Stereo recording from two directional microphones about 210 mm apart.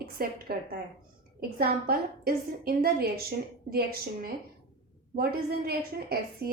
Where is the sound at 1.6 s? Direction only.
45° right (ahead or behind).